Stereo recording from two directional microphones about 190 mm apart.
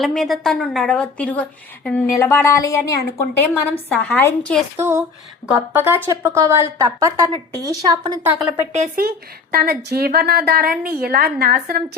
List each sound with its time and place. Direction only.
0.0 s a woman's voice: centre (ahead or behind)
4.8 s a woman's voice: 15° right (ahead or behind)
9.0 s a woman's voice: 50° right (ahead or behind)